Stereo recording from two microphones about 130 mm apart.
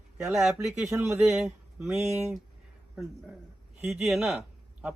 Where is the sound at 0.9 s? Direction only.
20° right (ahead or behind).